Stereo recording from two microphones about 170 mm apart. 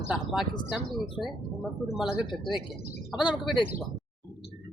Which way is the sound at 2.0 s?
Centre (ahead or behind).